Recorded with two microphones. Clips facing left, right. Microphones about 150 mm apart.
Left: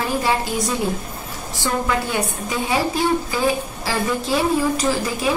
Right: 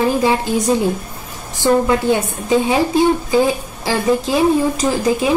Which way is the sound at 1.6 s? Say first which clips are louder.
Right 9 dB; 25° right (ahead or behind).